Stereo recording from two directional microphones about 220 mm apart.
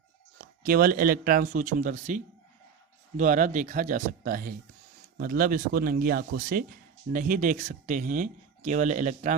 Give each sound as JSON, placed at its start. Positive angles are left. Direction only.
{"t": 0.6, "sound": "speech", "side_deg": -40}